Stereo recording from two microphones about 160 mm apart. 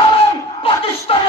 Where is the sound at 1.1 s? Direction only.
35° left (ahead or behind).